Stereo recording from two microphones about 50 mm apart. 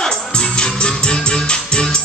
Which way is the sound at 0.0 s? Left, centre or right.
Centre.